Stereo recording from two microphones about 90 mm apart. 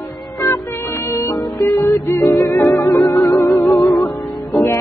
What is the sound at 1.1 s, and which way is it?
Music, 30° left (ahead or behind).